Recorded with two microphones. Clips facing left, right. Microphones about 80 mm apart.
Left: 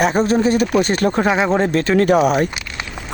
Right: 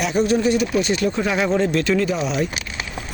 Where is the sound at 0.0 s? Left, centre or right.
Left.